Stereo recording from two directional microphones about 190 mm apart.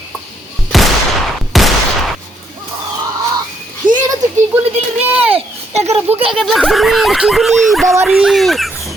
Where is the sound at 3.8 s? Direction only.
25° right (ahead or behind).